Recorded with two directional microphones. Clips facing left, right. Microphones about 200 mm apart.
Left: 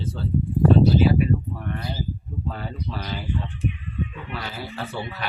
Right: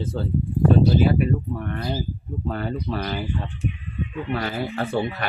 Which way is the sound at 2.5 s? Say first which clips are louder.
Right 6 dB; 55° right (ahead or behind).